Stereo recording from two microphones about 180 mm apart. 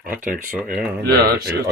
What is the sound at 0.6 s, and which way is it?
Speech, 5° right (ahead or behind).